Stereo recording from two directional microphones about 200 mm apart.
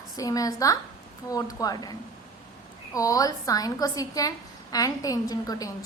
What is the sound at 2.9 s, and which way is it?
A woman's voice, 15° left (ahead or behind).